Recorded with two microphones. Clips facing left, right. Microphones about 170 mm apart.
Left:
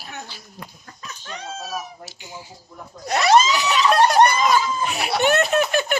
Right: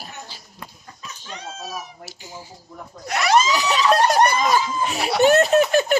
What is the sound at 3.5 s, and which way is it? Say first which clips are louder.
Snicker: even; 35° right (ahead or behind).